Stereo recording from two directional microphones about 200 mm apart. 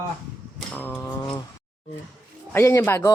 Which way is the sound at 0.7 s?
10° left (ahead or behind).